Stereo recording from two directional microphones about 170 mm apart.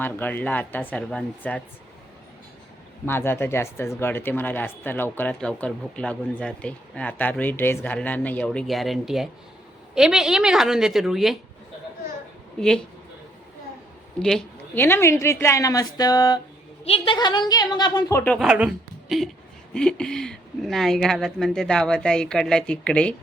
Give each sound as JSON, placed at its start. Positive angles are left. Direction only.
{"t": 0.0, "sound": "speech", "side_deg": 10}
{"t": 3.1, "sound": "speech", "side_deg": 15}
{"t": 12.5, "sound": "speech", "side_deg": 5}
{"t": 14.2, "sound": "speech", "side_deg": 5}
{"t": 14.8, "sound": "a woman's voice", "side_deg": 15}
{"t": 18.2, "sound": "speech", "side_deg": 5}
{"t": 18.4, "sound": "a woman's voice", "side_deg": -5}